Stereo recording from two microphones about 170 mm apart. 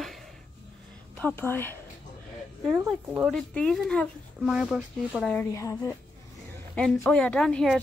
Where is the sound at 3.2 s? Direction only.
5° left (ahead or behind).